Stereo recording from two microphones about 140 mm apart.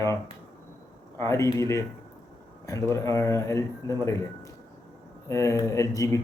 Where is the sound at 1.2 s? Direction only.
20° left (ahead or behind).